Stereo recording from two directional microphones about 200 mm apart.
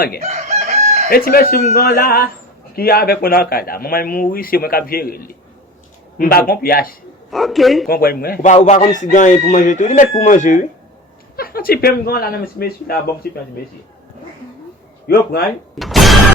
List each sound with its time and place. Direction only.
0.2 s chicken: 35° right (ahead or behind)
1.1 s speech: 50° left (ahead or behind)
7.3 s a man's voice: centre (ahead or behind)
7.9 s speech: 50° left (ahead or behind)
15.0 s speech: 50° left (ahead or behind)
15.8 s a man's voice: centre (ahead or behind)